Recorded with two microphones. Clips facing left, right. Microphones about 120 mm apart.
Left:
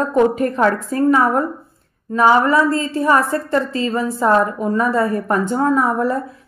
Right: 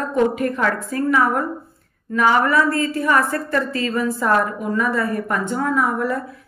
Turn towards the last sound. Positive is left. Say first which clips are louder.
# left 3 dB
turn(degrees=30)  # may be behind; listen again after turning